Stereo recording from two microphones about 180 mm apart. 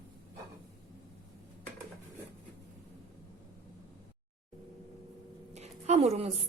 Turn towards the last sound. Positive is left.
turn(degrees=-35)  # may be behind; listen again after turning